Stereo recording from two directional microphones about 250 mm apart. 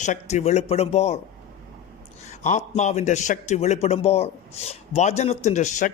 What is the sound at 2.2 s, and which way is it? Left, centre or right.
A man's voice, left.